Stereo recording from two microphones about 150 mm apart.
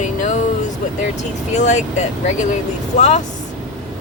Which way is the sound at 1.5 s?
50° left (ahead or behind).